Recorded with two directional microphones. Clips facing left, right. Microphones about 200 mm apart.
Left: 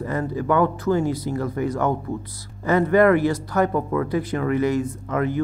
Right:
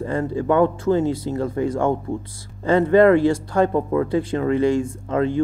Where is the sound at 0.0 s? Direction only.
25° right (ahead or behind).